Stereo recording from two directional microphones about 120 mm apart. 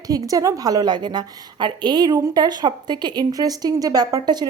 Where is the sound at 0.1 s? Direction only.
30° right (ahead or behind).